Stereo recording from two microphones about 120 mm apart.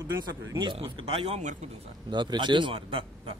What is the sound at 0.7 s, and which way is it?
Speech, 50° right (ahead or behind).